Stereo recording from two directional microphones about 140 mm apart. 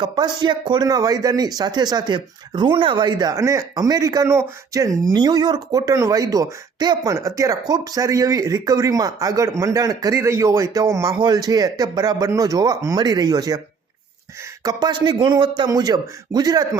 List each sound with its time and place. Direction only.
0.0 s speech: 30° right (ahead or behind)
14.6 s speech: 30° right (ahead or behind)